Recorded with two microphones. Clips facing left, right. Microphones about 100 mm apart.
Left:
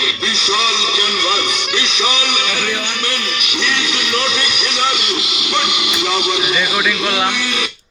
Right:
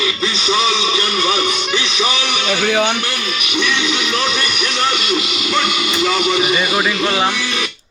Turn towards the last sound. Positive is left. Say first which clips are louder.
# even
turn(degrees=5)  # may be behind; listen again after turning